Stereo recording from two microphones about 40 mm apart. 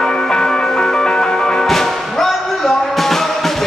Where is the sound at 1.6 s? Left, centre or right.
Centre.